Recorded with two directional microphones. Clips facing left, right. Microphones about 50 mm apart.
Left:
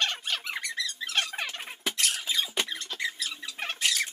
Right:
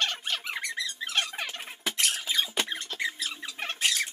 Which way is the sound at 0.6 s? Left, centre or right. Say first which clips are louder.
Even; centre.